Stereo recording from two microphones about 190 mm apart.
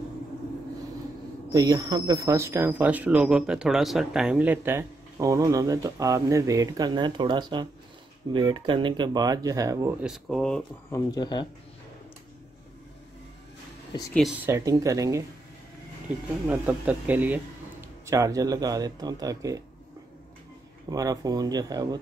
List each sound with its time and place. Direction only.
1.5 s speech: 15° right (ahead or behind)
10.0 s speech: centre (ahead or behind)
10.9 s speech: 20° left (ahead or behind)
14.4 s speech: 15° right (ahead or behind)
16.4 s speech: 10° right (ahead or behind)
20.9 s speech: 20° right (ahead or behind)